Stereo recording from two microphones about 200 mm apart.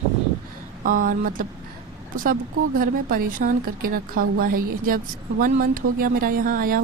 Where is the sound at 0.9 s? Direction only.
45° right (ahead or behind).